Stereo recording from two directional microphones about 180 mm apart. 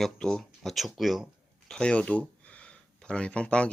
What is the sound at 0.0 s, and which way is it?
Speech, 5° left (ahead or behind).